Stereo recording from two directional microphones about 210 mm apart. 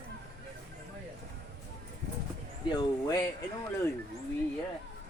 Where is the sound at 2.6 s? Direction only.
20° left (ahead or behind).